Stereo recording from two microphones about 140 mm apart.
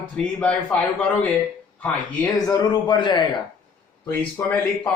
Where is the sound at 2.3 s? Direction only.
25° left (ahead or behind).